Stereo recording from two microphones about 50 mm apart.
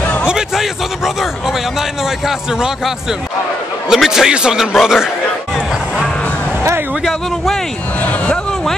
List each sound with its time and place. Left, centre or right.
0.0 s a sound: left
0.6 s a man's voice: centre
3.9 s a man's voice: centre